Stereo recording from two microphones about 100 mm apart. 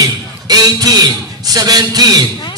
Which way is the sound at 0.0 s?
40° right (ahead or behind).